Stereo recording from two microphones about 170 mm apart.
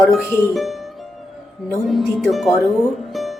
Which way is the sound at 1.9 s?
Centre (ahead or behind).